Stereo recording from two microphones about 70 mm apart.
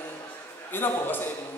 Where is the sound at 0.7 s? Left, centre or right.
Left.